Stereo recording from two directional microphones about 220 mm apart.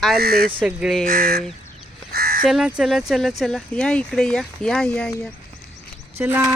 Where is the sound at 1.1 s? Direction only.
40° right (ahead or behind).